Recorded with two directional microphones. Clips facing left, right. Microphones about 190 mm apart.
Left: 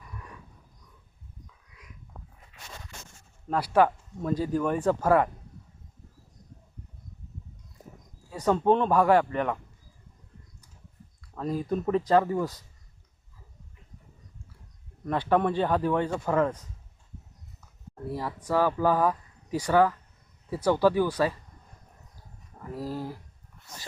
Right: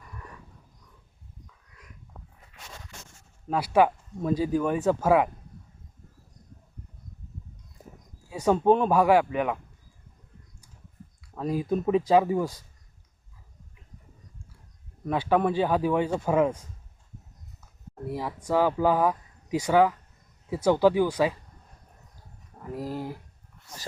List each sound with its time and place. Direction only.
3.5 s speech: 10° right (ahead or behind)
8.3 s speech: 10° right (ahead or behind)
11.3 s speech: 10° right (ahead or behind)
15.0 s speech: 5° right (ahead or behind)
18.1 s speech: 10° right (ahead or behind)
22.7 s speech: 15° right (ahead or behind)